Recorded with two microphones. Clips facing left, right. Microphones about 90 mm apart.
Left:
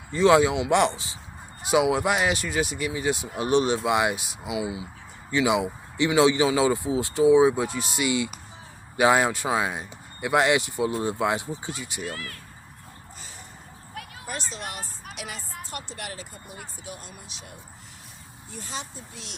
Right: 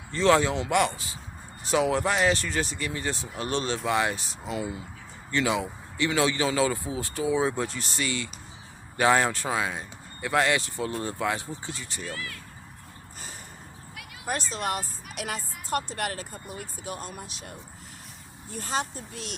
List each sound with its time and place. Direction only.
0.1 s speech: 15° left (ahead or behind)
1.6 s speech: 10° left (ahead or behind)
12.1 s speech: 40° left (ahead or behind)
14.5 s speech: 50° right (ahead or behind)
15.1 s music: 50° right (ahead or behind)
15.7 s speech: 50° right (ahead or behind)
18.6 s speech: 50° right (ahead or behind)